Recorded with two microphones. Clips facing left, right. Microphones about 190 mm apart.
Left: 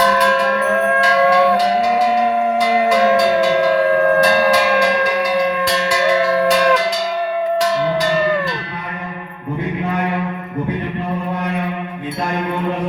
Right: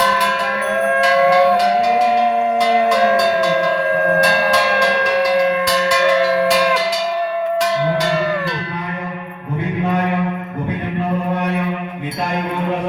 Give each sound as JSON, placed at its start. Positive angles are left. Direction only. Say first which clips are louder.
{"t": 1.3, "sound": "music", "louder": "right 1 dB", "side_deg": 0}